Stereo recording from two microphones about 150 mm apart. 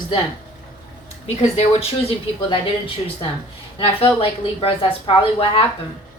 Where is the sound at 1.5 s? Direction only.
40° left (ahead or behind).